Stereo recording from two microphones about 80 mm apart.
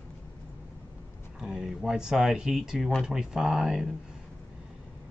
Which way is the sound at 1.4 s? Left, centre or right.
Centre.